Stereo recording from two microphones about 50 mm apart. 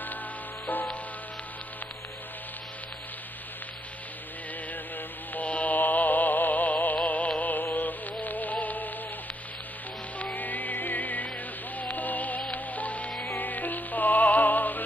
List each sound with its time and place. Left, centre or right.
5.3 s music: left
10.1 s music: left